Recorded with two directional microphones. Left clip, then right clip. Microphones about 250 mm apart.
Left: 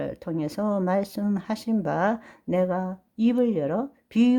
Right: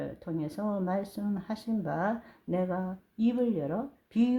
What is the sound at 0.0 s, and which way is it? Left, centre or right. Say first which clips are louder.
Speech: left 6 dB; left.